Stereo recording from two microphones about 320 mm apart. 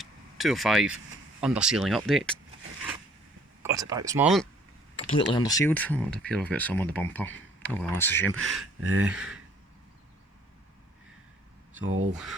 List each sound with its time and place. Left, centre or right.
0.0 s a sound: centre
1.4 s speech: centre
3.6 s speech: centre
5.2 s speech: centre
11.8 s speech: right